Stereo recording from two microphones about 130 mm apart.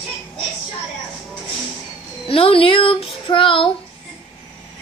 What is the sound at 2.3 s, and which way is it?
Female singing, 45° left (ahead or behind).